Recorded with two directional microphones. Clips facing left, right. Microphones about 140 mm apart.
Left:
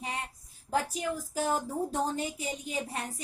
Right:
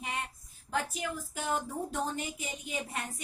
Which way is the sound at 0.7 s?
35° left (ahead or behind).